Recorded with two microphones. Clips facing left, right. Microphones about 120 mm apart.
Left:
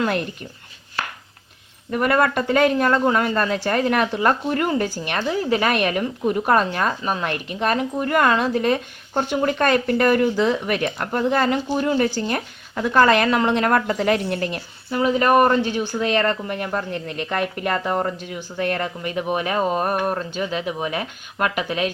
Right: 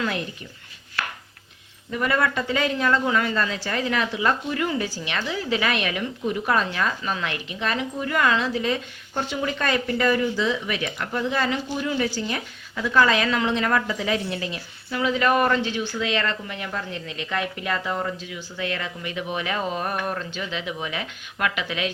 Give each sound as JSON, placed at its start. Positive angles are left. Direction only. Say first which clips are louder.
{"t": 0.0, "sound": "a woman's voice", "louder": "left 5 dB", "side_deg": 55}
{"t": 1.9, "sound": "a woman's voice", "louder": "left 5 dB", "side_deg": 55}
{"t": 14.8, "sound": "a woman's voice", "louder": "left 4 dB", "side_deg": 35}